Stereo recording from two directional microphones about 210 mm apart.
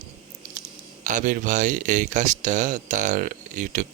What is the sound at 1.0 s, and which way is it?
Speech, 40° right (ahead or behind).